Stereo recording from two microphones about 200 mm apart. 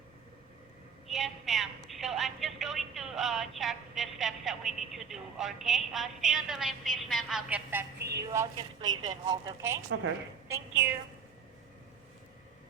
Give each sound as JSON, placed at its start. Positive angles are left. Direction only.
{"t": 1.0, "sound": "a woman's voice", "side_deg": 0}
{"t": 7.9, "sound": "a woman's voice", "side_deg": -55}
{"t": 9.0, "sound": "speech", "side_deg": -20}